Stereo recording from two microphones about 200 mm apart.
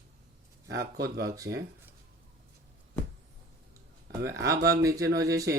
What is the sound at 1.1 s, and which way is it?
Speech, 50° right (ahead or behind).